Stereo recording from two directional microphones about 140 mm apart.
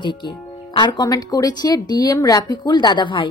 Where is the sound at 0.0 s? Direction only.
35° left (ahead or behind).